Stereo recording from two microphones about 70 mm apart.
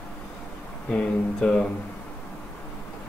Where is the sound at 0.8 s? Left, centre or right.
Centre.